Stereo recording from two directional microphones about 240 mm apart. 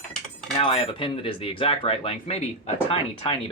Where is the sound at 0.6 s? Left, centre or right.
Left.